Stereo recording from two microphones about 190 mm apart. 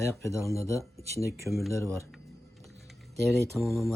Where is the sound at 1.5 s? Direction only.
Centre (ahead or behind).